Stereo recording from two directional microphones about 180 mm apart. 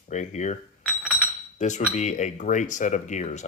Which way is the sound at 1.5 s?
40° left (ahead or behind).